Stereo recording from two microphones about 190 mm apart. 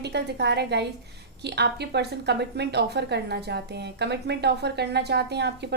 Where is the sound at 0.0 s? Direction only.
65° right (ahead or behind).